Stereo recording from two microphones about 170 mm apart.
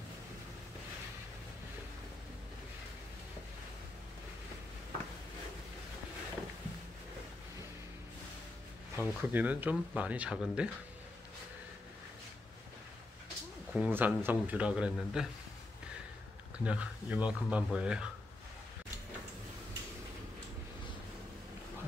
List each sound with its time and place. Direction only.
8.9 s speech: 10° right (ahead or behind)
13.7 s speech: 10° right (ahead or behind)
16.6 s speech: 5° right (ahead or behind)